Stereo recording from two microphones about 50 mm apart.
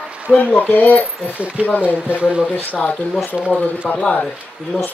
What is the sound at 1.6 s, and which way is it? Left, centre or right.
Speech, right.